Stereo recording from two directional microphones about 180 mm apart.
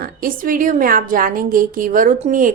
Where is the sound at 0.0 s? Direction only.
50° right (ahead or behind).